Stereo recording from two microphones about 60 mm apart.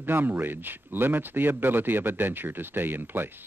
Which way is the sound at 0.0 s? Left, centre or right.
Right.